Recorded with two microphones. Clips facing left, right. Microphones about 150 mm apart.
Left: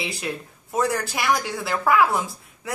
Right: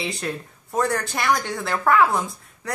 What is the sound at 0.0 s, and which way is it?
A woman's voice, centre (ahead or behind).